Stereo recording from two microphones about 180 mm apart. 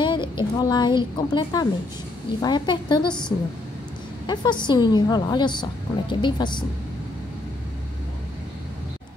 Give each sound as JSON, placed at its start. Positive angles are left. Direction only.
{"t": 0.0, "sound": "a woman's voice", "side_deg": 25}
{"t": 4.3, "sound": "a woman's voice", "side_deg": 25}